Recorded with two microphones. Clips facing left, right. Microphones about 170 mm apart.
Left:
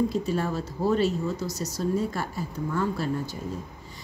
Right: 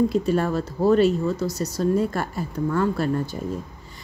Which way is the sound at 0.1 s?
65° right (ahead or behind).